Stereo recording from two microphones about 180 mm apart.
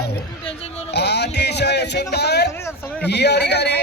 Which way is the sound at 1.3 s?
70° left (ahead or behind).